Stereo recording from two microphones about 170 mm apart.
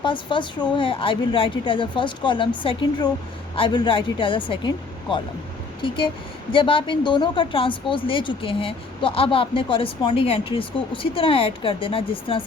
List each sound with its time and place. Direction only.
0.0 s a woman's voice: 30° left (ahead or behind)
5.8 s a woman's voice: 30° left (ahead or behind)